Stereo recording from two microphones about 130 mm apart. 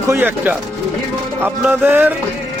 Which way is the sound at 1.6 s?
15° right (ahead or behind).